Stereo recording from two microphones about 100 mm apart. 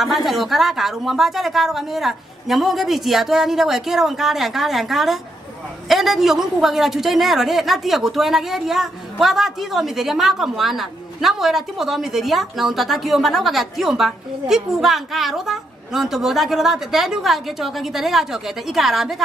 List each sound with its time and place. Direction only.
0.0 s a man's voice: centre (ahead or behind)